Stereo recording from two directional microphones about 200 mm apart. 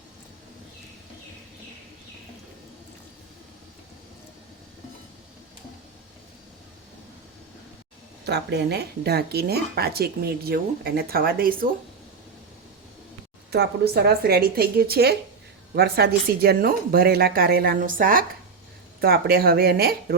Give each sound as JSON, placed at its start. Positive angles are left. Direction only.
{"t": 8.3, "sound": "speech", "side_deg": -55}
{"t": 13.5, "sound": "speech", "side_deg": -50}